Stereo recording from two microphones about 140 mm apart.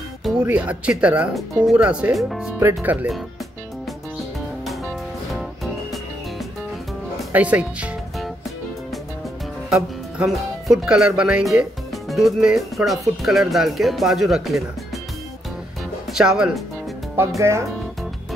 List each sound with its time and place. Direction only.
0.2 s speech: 5° right (ahead or behind)
2.6 s speech: 10° right (ahead or behind)
5.3 s music: centre (ahead or behind)
9.7 s speech: 5° right (ahead or behind)
16.1 s speech: 5° right (ahead or behind)
17.4 s speech: 20° right (ahead or behind)